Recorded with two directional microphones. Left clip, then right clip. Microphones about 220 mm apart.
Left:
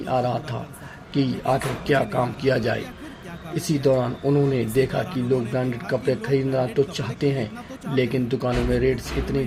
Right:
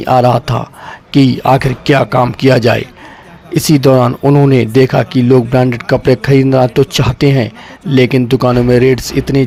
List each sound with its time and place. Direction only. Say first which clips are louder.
0.0 s speech: right 14 dB; 50° right (ahead or behind)